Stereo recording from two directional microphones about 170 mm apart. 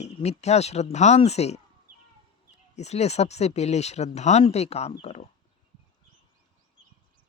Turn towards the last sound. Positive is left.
turn(degrees=35)  # may be behind; listen again after turning